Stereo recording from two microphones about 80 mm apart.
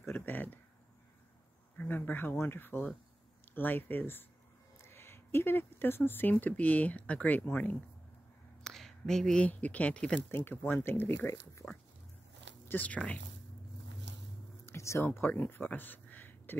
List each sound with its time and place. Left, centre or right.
0.1 s speech: left
1.8 s speech: left
8.6 s a sound: centre
9.5 s speech: centre
10.3 s speech: left
12.6 s speech: centre
14.7 s speech: left